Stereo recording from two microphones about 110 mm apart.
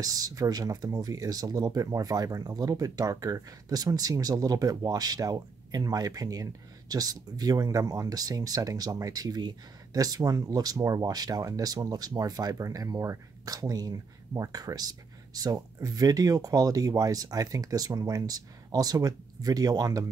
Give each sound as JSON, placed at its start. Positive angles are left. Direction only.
{"t": 0.0, "sound": "speech", "side_deg": -35}